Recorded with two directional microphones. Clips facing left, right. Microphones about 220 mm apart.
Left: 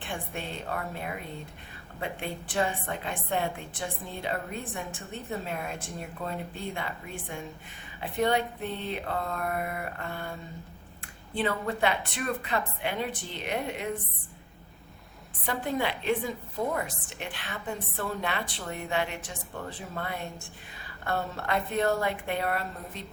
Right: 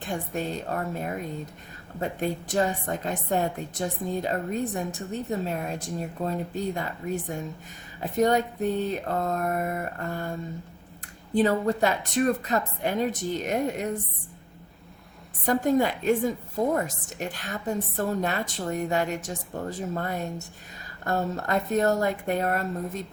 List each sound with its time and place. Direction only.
0.0 s a woman's voice: 40° right (ahead or behind)
11.3 s a woman's voice: 40° right (ahead or behind)
15.4 s a woman's voice: 45° right (ahead or behind)